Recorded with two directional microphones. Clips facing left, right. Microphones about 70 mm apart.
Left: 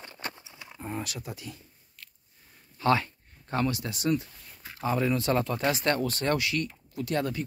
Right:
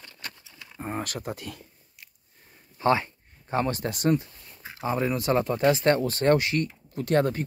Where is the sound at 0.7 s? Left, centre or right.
Right.